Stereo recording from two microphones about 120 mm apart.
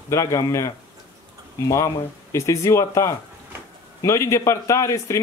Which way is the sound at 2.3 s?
25° left (ahead or behind).